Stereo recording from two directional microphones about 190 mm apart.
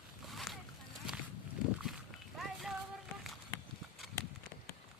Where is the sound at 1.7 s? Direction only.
Centre (ahead or behind).